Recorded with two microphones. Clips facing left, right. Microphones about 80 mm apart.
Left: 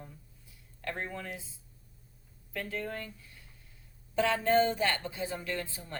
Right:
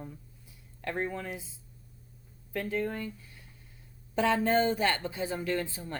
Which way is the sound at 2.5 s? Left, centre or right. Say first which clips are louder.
Right 5 dB; right.